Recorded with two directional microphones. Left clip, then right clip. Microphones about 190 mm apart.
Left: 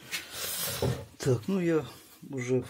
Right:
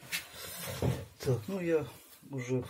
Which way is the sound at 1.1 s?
55° left (ahead or behind).